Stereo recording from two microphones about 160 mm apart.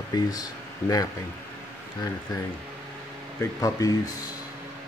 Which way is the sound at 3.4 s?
20° left (ahead or behind).